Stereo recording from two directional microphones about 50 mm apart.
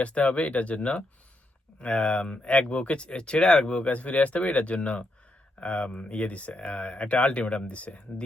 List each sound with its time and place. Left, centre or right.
0.0 s speech: left
3.8 s speech: left